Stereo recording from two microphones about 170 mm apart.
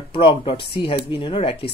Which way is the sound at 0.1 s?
30° left (ahead or behind).